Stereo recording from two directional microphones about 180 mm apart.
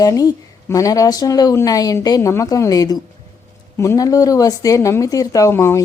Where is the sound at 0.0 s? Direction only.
20° left (ahead or behind).